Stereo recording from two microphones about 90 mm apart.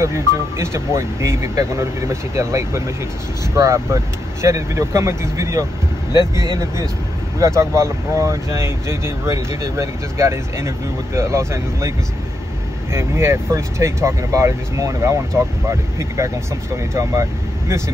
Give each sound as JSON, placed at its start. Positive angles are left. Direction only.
{"t": 0.0, "sound": "speech", "side_deg": -30}
{"t": 7.3, "sound": "speech", "side_deg": -35}
{"t": 12.9, "sound": "speech", "side_deg": -30}